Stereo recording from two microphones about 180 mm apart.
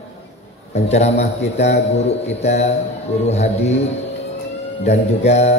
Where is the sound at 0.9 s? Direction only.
35° left (ahead or behind).